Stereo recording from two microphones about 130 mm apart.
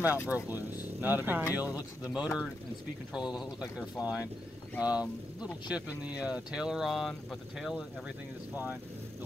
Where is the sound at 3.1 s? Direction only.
Centre (ahead or behind).